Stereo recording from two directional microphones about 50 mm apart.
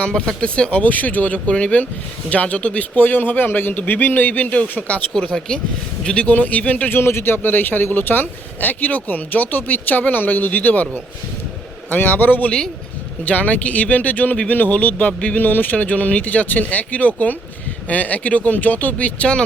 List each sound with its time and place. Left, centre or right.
0.0 s speech: centre
6.0 s a man's voice: centre
6.2 s speech: left
6.9 s speech: left
7.3 s speech: left
11.9 s speech: left
15.4 s speech: left